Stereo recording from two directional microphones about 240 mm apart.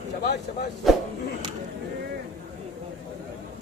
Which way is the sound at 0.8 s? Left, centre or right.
Centre.